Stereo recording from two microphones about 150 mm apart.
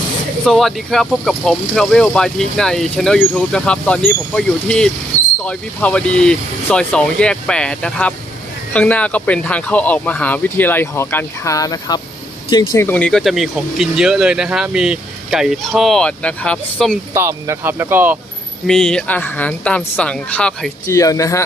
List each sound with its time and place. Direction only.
0.4 s speech: centre (ahead or behind)
17.2 s speech: 20° right (ahead or behind)
18.7 s speech: 5° left (ahead or behind)
20.8 s speech: 20° left (ahead or behind)